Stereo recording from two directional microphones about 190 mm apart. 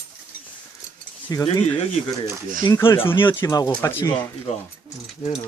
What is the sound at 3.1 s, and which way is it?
Speech, 25° left (ahead or behind).